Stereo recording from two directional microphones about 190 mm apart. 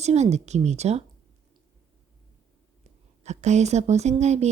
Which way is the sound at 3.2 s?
35° right (ahead or behind).